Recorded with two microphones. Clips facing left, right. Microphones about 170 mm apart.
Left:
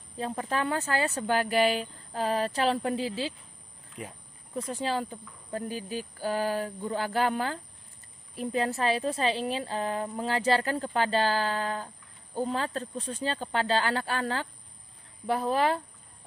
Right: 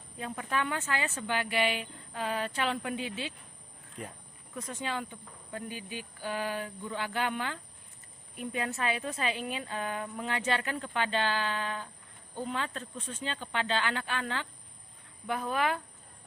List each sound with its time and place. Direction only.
0.2 s a woman's voice: 35° left (ahead or behind)
4.0 s speech: 5° left (ahead or behind)
4.6 s a woman's voice: 30° left (ahead or behind)